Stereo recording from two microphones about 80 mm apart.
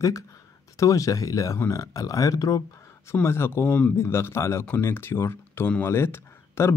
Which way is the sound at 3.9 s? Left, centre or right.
Left.